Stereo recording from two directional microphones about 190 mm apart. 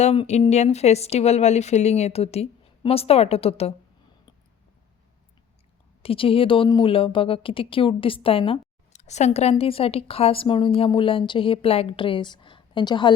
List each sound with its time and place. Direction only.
0.0 s speech: 35° left (ahead or behind)
6.0 s a woman's voice: 30° left (ahead or behind)